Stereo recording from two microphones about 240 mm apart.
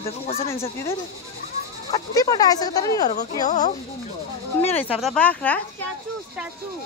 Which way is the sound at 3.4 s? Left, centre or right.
Left.